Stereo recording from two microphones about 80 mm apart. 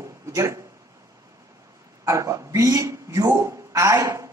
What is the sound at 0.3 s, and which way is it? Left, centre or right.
Speech, right.